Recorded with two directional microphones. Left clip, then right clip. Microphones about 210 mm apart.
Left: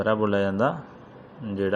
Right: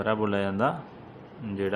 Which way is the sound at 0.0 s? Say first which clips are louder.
Left 4 dB; 10° left (ahead or behind).